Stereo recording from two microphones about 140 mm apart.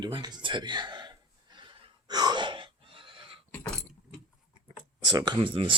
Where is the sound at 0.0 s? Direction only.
30° right (ahead or behind).